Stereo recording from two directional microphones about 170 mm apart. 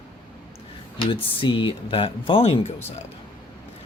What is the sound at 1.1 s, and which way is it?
Speech, 30° left (ahead or behind).